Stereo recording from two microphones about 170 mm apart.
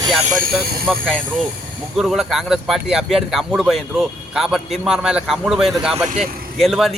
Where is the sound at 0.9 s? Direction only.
Centre (ahead or behind).